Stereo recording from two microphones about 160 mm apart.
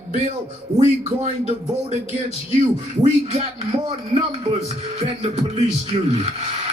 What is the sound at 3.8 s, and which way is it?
A man's voice, 35° right (ahead or behind).